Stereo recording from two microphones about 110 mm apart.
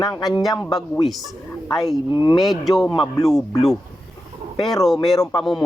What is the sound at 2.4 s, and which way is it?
Speech, centre (ahead or behind).